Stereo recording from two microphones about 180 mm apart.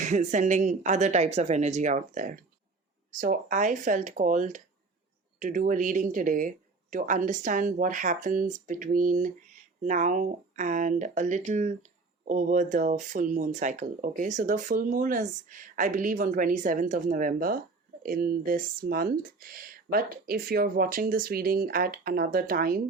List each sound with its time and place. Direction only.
0.0 s speech: 40° right (ahead or behind)